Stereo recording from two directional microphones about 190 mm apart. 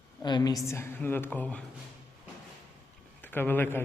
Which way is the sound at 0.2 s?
20° left (ahead or behind).